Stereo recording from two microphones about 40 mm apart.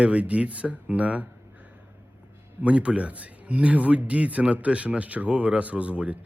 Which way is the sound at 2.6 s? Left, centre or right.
Right.